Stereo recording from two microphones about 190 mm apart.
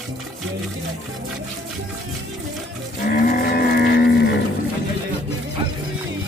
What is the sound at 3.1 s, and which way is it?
Livestock, 50° left (ahead or behind).